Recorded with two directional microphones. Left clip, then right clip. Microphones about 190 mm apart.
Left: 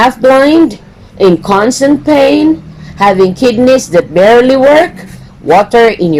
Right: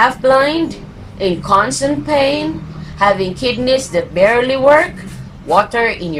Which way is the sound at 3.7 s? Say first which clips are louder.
Left 6 dB; 45° left (ahead or behind).